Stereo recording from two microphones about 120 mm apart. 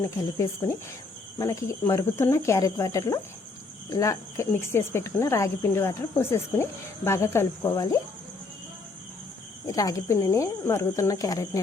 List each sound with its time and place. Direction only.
0.0 s speech: 25° left (ahead or behind)
9.6 s speech: 25° left (ahead or behind)